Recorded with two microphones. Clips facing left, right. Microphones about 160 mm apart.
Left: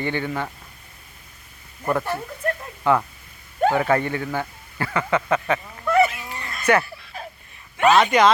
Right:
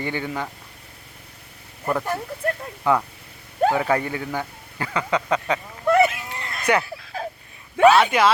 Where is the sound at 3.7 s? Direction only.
10° right (ahead or behind).